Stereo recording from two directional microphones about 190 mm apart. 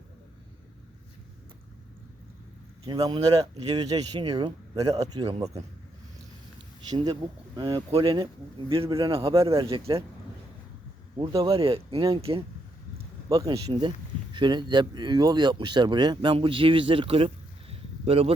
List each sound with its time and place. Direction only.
2.8 s speech: 20° right (ahead or behind)
6.8 s speech: 20° right (ahead or behind)
11.2 s speech: 25° right (ahead or behind)